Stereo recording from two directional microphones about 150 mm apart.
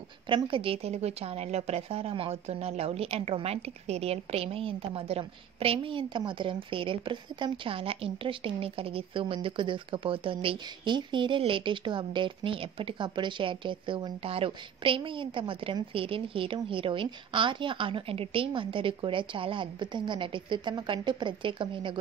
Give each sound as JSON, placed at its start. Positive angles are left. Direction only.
{"t": 0.3, "sound": "a woman's voice", "side_deg": -35}